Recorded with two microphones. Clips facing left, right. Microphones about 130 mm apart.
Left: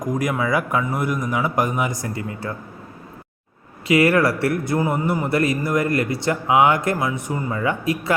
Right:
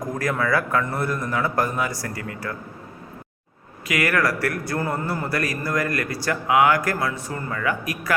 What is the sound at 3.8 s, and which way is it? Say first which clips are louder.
A man's voice: left 6 dB; 25° left (ahead or behind).